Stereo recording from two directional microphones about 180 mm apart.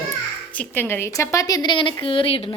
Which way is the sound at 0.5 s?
10° left (ahead or behind).